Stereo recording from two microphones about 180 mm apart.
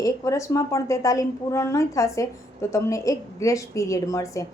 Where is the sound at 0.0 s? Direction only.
15° left (ahead or behind).